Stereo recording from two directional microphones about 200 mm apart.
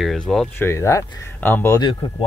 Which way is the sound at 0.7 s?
15° left (ahead or behind).